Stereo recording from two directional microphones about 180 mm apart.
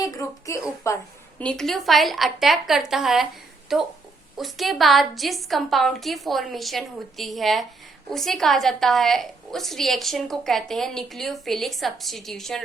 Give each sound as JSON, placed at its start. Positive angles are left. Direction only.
{"t": 0.0, "sound": "a woman's voice", "side_deg": 20}
{"t": 1.4, "sound": "a woman's voice", "side_deg": 5}